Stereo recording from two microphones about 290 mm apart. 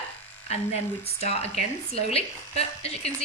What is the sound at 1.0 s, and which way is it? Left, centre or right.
Speech, left.